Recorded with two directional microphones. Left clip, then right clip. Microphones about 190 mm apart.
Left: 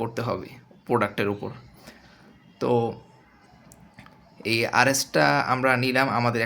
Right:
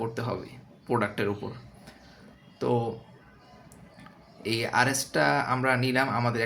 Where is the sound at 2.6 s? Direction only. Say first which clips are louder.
Left 4 dB; 30° left (ahead or behind).